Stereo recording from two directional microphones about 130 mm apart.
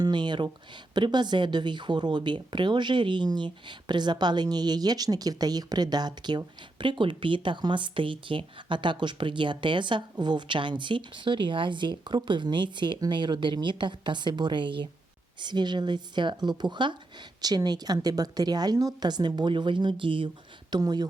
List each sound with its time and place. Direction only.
0.0 s speech: 35° right (ahead or behind)